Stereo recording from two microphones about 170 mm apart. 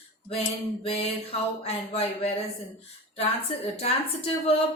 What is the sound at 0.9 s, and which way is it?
Speech, 35° left (ahead or behind).